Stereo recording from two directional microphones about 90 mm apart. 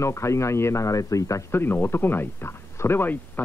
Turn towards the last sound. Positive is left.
turn(degrees=25)  # may be behind; listen again after turning